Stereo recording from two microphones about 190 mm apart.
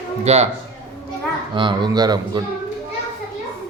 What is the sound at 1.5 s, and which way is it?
Speech, 25° right (ahead or behind).